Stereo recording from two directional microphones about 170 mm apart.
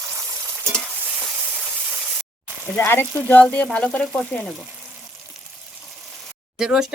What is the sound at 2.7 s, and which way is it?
Speech, 15° left (ahead or behind).